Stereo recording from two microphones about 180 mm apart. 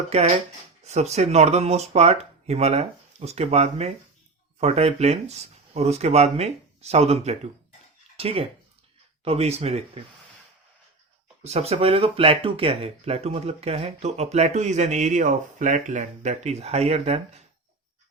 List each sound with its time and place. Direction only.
0.1 s speech: 35° right (ahead or behind)
11.4 s speech: 35° right (ahead or behind)